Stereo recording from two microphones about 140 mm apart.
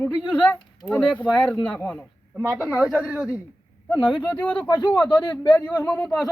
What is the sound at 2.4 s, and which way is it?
Speech, 10° right (ahead or behind).